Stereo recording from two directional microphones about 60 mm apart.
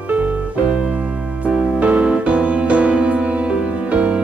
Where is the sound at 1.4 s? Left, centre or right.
Centre.